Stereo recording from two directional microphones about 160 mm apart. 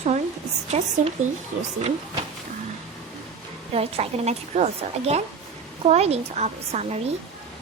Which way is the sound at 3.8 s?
40° right (ahead or behind).